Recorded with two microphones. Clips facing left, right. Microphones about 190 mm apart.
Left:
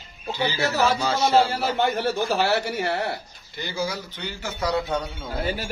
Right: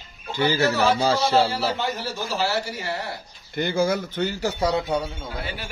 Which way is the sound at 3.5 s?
55° right (ahead or behind).